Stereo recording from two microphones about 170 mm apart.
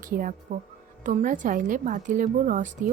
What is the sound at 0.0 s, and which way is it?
Speech, 55° right (ahead or behind).